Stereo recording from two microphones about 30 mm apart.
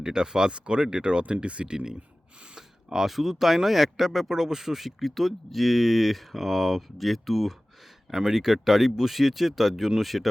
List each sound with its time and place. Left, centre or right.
0.0 s speech: right
2.6 s speech: centre
8.1 s speech: centre